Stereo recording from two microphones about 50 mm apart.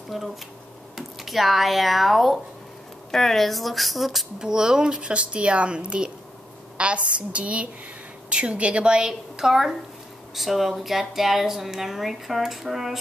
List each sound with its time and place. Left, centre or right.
0.1 s a woman's voice: centre